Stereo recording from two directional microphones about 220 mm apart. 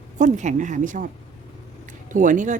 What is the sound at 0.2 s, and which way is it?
Speech, 35° right (ahead or behind).